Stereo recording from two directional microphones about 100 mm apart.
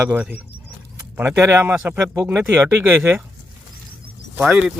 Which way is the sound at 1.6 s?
15° right (ahead or behind).